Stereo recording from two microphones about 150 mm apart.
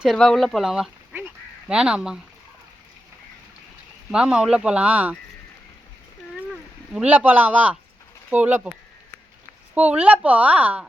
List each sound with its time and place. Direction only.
0.0 s speech: centre (ahead or behind)
1.2 s quack: 5° right (ahead or behind)
4.1 s speech: 5° right (ahead or behind)
6.9 s speech: 10° right (ahead or behind)
9.7 s speech: 10° right (ahead or behind)